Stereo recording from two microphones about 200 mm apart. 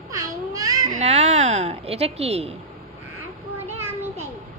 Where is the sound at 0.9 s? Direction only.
35° right (ahead or behind).